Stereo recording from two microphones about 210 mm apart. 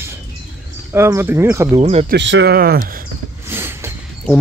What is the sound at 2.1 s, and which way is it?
Speech, 55° right (ahead or behind).